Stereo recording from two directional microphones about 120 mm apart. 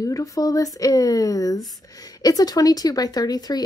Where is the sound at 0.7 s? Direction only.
30° left (ahead or behind).